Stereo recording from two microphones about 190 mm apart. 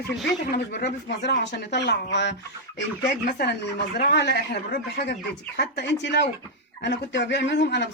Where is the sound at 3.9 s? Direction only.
60° left (ahead or behind).